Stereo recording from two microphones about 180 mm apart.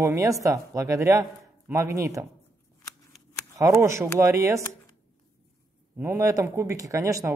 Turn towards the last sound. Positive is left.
turn(degrees=-15)  # may be behind; listen again after turning